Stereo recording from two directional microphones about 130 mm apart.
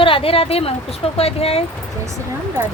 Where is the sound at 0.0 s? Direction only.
45° left (ahead or behind).